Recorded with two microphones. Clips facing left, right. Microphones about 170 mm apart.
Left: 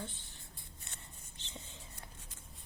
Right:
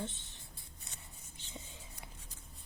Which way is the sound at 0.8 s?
5° right (ahead or behind).